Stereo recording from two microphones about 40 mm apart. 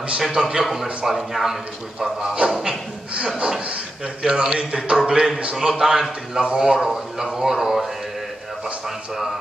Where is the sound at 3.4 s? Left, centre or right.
Right.